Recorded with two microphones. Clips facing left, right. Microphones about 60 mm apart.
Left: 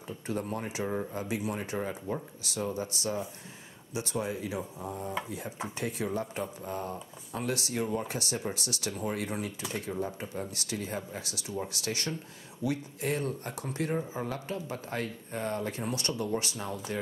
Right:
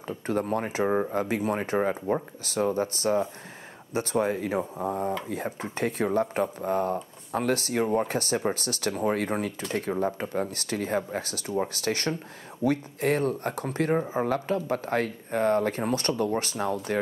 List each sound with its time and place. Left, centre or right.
0.0 s speech: right